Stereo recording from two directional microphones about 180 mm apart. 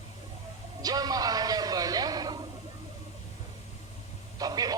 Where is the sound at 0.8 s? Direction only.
20° right (ahead or behind).